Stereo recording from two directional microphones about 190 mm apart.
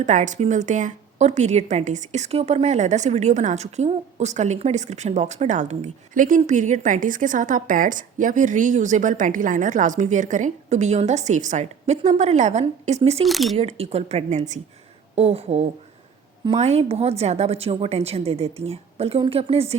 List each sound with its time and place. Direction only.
0.0 s a woman's voice: 40° right (ahead or behind)
13.2 s speech: centre (ahead or behind)
13.6 s a woman's voice: 35° right (ahead or behind)